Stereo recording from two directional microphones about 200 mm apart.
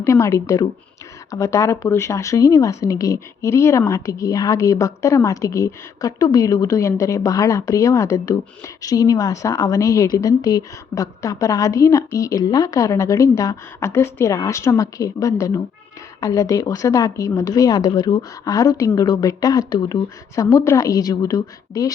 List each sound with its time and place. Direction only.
0.0 s speech: 15° left (ahead or behind)